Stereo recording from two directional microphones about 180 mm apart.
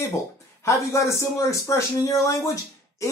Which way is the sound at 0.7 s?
15° left (ahead or behind).